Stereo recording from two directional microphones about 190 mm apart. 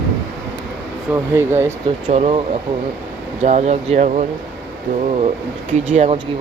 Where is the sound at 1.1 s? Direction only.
15° right (ahead or behind).